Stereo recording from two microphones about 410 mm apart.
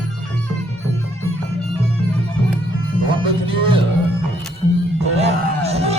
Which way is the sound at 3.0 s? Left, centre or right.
Centre.